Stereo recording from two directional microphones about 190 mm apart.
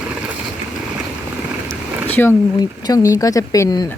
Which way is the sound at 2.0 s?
10° left (ahead or behind).